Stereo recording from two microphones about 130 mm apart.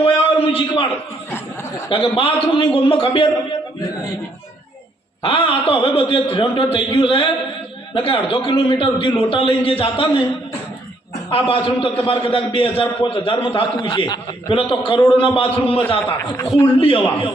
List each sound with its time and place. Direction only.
0.0 s a sound: 45° left (ahead or behind)
1.9 s a man's voice: 45° left (ahead or behind)
5.2 s a man's voice: 40° left (ahead or behind)
11.3 s a man's voice: 45° left (ahead or behind)